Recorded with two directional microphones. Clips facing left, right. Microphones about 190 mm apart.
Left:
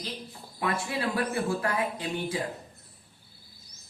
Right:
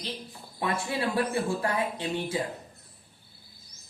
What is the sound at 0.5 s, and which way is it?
Speech, 25° right (ahead or behind).